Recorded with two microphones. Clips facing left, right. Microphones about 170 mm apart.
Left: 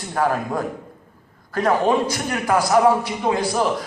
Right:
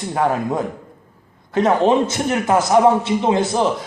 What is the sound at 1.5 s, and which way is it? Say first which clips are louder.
A man's voice: right 3 dB; 20° right (ahead or behind).